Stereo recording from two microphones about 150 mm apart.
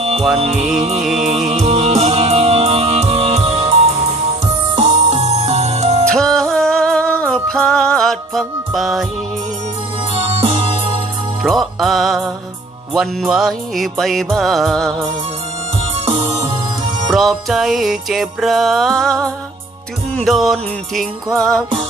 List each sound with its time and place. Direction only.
0.3 s music: 40° right (ahead or behind)
1.0 s music: centre (ahead or behind)
1.5 s music: 45° right (ahead or behind)
6.1 s music: 5° left (ahead or behind)
10.2 s music: 40° right (ahead or behind)
11.4 s music: centre (ahead or behind)
16.0 s music: 40° right (ahead or behind)
17.1 s music: centre (ahead or behind)